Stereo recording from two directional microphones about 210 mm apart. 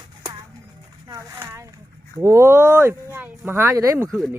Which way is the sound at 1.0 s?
15° right (ahead or behind).